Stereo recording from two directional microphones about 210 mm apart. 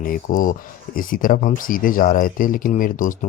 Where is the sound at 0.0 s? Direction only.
45° left (ahead or behind).